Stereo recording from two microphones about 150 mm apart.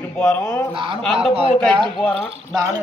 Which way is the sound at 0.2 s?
15° left (ahead or behind).